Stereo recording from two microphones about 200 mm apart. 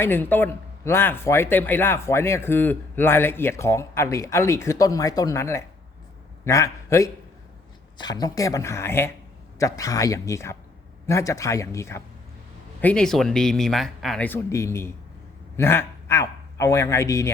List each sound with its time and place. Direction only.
0.0 s a man's voice: 10° left (ahead or behind)